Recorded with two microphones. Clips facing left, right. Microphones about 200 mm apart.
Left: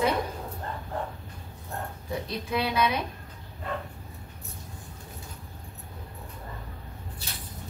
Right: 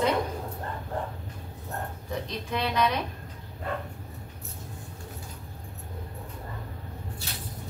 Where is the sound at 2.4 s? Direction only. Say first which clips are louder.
Left 1 dB; 5° left (ahead or behind).